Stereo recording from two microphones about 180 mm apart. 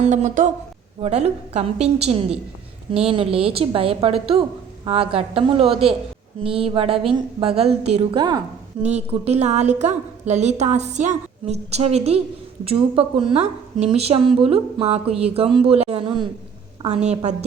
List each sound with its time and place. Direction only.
0.0 s a woman's voice: 40° right (ahead or behind)
8.1 s a woman's voice: 25° right (ahead or behind)
8.8 s a woman's voice: 35° right (ahead or behind)
16.9 s a woman's voice: 40° right (ahead or behind)